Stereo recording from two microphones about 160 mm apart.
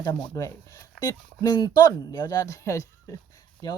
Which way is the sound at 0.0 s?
25° left (ahead or behind).